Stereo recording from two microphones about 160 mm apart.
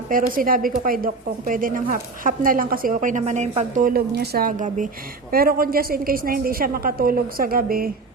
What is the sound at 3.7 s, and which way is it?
A woman's voice, 65° right (ahead or behind).